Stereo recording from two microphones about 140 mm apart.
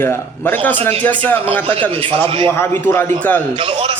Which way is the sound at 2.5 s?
15° left (ahead or behind).